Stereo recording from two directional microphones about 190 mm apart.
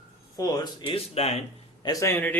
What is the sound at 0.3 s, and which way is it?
Speech, 20° left (ahead or behind).